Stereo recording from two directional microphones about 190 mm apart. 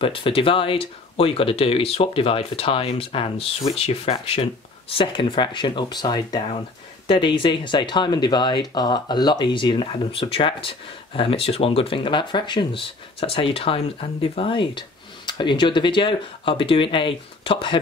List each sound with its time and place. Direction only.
0.0 s speech: 30° left (ahead or behind)